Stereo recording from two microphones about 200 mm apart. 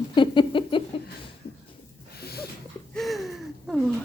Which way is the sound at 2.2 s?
50° left (ahead or behind).